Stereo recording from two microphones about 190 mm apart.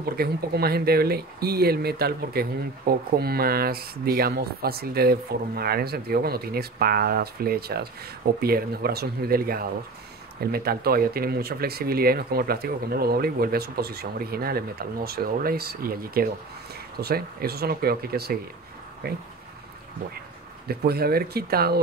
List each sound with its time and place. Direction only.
0.2 s speech: 55° right (ahead or behind)
20.6 s speech: 55° right (ahead or behind)